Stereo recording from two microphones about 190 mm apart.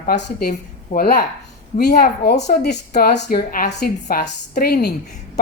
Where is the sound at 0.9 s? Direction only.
50° left (ahead or behind).